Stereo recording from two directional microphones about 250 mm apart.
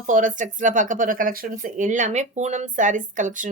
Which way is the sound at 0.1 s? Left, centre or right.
Right.